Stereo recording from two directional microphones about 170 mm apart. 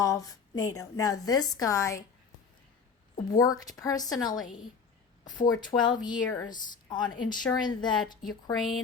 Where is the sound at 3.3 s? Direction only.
20° left (ahead or behind).